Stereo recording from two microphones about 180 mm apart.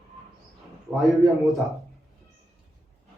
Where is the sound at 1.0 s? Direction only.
Centre (ahead or behind).